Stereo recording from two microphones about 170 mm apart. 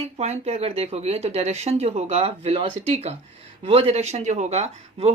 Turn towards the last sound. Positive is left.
turn(degrees=-40)  # may be behind; listen again after turning